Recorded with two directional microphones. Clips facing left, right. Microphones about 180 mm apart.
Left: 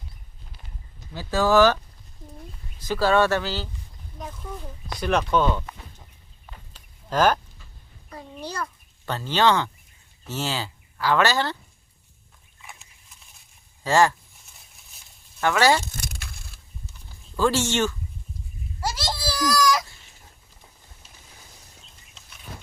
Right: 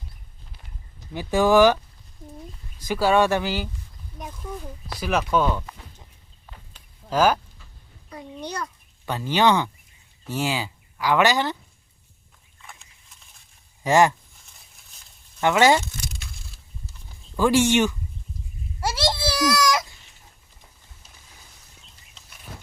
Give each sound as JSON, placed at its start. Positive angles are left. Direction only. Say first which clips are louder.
{"t": 1.1, "sound": "speech", "louder": "right 2 dB", "side_deg": -15}
{"t": 2.8, "sound": "speech", "louder": "right 1 dB", "side_deg": -10}
{"t": 4.9, "sound": "speech", "louder": "even", "side_deg": -5}
{"t": 7.1, "sound": "speech", "louder": "right 1 dB", "side_deg": -10}
{"t": 9.0, "sound": "speech", "louder": "right 1 dB", "side_deg": -10}
{"t": 13.8, "sound": "speech", "louder": "right 2 dB", "side_deg": -20}
{"t": 15.4, "sound": "speech", "louder": "right 2 dB", "side_deg": -20}
{"t": 16.0, "sound": "a sound", "louder": "even", "side_deg": 55}
{"t": 17.3, "sound": "speech", "louder": "right 4 dB", "side_deg": -15}
{"t": 18.9, "sound": "a sound", "louder": "right 5 dB", "side_deg": -25}